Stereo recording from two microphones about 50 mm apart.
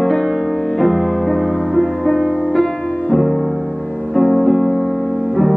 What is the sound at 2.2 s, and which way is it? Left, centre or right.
Music, right.